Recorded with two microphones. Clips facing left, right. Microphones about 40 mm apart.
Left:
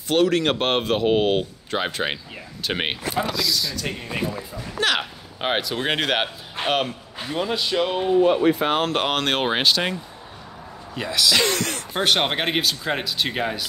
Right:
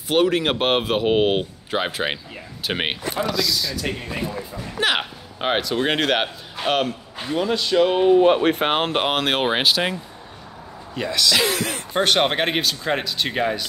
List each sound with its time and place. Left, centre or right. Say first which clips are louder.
0.1 s speech: even; centre
4.7 s speech: right 1 dB; centre
5.4 s speech: right 2 dB; centre
7.9 s speech: right 7 dB; centre
8.2 s speech: right 1 dB; right
8.9 s speech: right 1 dB; centre
11.0 s speech: even; centre